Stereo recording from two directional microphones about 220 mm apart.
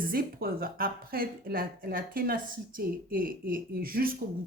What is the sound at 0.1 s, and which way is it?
A woman's voice, 45° right (ahead or behind).